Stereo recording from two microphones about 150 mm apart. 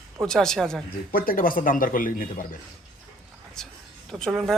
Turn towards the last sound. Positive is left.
turn(degrees=0)  # may be behind; listen again after turning